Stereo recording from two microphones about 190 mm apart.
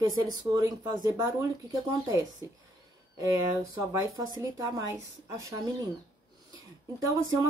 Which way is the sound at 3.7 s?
20° right (ahead or behind).